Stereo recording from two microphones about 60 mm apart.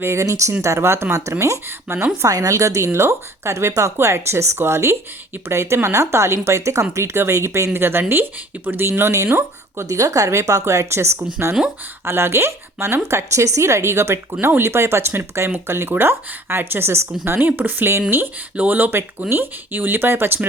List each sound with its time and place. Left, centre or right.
0.0 s speech: right
0.6 s speech: right
1.1 s speech: right
2.2 s speech: right
8.9 s speech: right
9.8 s speech: right
18.5 s speech: right